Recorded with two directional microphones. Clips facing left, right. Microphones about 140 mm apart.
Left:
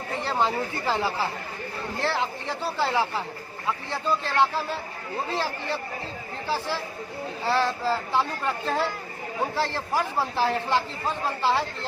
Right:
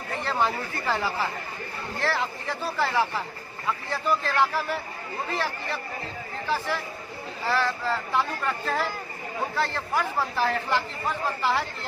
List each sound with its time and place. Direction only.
0.3 s speech: 20° left (ahead or behind)